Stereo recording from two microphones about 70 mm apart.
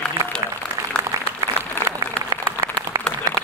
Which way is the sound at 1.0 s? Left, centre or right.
Right.